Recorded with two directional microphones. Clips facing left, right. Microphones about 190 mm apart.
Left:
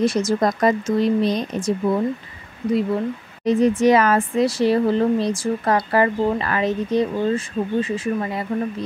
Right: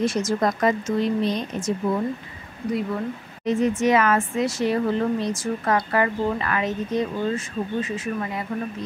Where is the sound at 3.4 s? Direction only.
35° left (ahead or behind).